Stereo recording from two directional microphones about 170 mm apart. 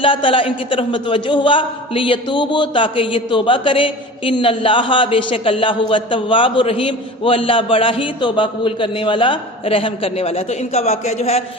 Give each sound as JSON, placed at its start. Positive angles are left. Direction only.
{"t": 0.0, "sound": "a man's voice", "side_deg": 30}